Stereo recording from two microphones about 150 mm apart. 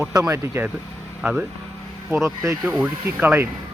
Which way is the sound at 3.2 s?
15° right (ahead or behind).